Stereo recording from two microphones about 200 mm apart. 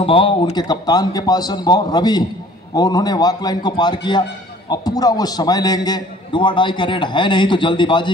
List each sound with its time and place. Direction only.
0.0 s a man's voice: 25° left (ahead or behind)